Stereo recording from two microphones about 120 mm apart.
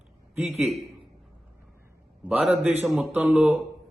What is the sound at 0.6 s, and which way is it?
Speech, centre (ahead or behind).